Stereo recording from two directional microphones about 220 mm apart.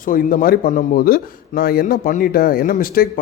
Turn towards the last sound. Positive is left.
turn(degrees=40)  # may be behind; listen again after turning